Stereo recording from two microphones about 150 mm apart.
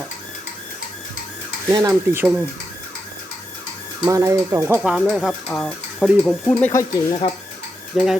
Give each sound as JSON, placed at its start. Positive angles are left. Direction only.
{"t": 1.7, "sound": "speech", "side_deg": -15}
{"t": 4.0, "sound": "speech", "side_deg": -20}
{"t": 4.8, "sound": "speech", "side_deg": -5}
{"t": 6.7, "sound": "speech", "side_deg": 20}
{"t": 7.9, "sound": "speech", "side_deg": -5}